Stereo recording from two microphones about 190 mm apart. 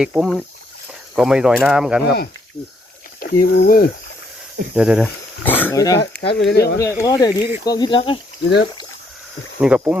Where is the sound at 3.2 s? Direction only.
50° left (ahead or behind).